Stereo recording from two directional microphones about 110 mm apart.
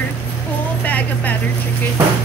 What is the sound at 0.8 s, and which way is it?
Speech, 15° left (ahead or behind).